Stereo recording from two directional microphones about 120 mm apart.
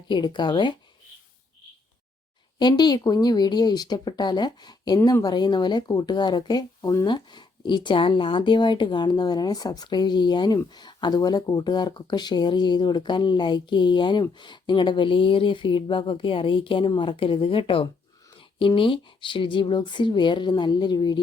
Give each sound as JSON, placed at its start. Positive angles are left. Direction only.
{"t": 0.1, "sound": "speech", "side_deg": 40}
{"t": 2.6, "sound": "speech", "side_deg": 35}